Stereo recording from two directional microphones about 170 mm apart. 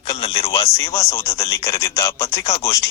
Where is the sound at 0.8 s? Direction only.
15° left (ahead or behind).